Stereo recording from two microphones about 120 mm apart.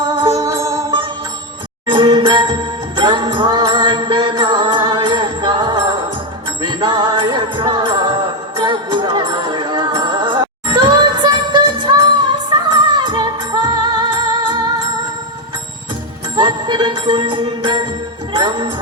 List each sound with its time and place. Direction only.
0.2 s music: 30° right (ahead or behind)
1.9 s music: 40° right (ahead or behind)
16.3 s music: 40° right (ahead or behind)